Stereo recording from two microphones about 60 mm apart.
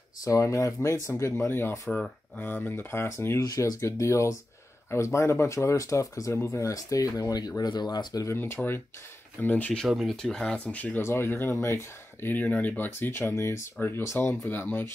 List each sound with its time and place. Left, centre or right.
0.2 s speech: left
3.4 s speech: left
6.3 s speech: left
8.1 s speech: left
8.6 s speech: left
9.8 s speech: centre
10.2 s speech: centre
10.6 s speech: left
11.0 s speech: left
12.4 s speech: left
13.3 s speech: left
13.7 s speech: left